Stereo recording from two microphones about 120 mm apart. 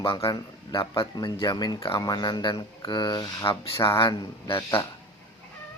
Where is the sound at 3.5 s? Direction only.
45° left (ahead or behind).